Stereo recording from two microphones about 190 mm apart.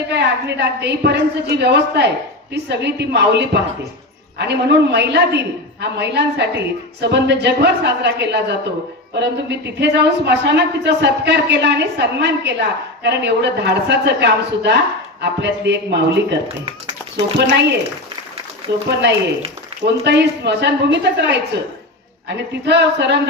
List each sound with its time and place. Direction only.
0.1 s speech: 60° right (ahead or behind)
18.9 s speech: 60° right (ahead or behind)